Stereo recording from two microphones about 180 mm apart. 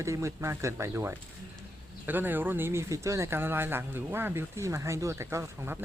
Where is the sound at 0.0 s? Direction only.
15° right (ahead or behind).